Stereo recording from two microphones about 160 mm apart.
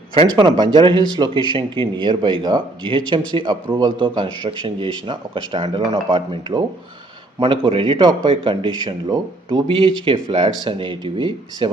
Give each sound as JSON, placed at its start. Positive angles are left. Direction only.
{"t": 0.1, "sound": "a man's voice", "side_deg": -30}